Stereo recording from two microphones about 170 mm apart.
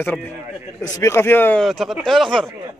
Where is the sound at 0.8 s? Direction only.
20° left (ahead or behind).